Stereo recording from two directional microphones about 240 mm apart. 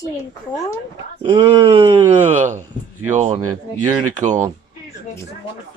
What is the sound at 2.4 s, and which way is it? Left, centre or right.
Speech, right.